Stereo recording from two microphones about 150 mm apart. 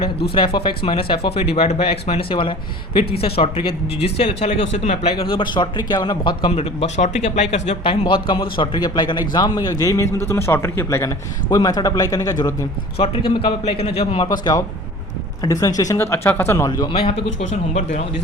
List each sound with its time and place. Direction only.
0.3 s speech: 35° left (ahead or behind)
8.0 s speech: 35° left (ahead or behind)
14.3 s speech: 25° left (ahead or behind)
16.9 s a man's voice: 40° left (ahead or behind)